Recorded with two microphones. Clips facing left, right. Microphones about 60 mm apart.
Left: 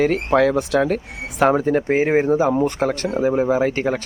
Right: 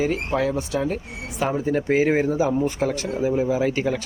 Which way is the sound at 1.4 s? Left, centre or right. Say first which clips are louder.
Left 8 dB; left.